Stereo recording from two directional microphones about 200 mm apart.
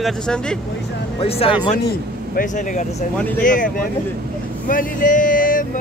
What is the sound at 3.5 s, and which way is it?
Speech, 40° left (ahead or behind).